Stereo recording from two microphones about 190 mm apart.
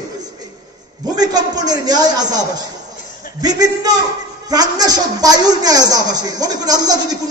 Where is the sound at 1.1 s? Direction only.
20° right (ahead or behind).